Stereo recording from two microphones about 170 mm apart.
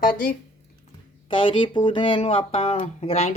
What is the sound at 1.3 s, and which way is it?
Speech, 30° left (ahead or behind).